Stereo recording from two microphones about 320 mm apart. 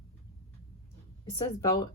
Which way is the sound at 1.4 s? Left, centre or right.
Centre.